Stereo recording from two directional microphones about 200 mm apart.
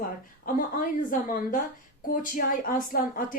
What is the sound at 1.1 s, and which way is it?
Speech, 40° left (ahead or behind).